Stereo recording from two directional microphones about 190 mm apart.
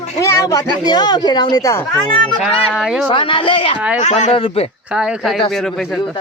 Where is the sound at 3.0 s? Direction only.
25° left (ahead or behind).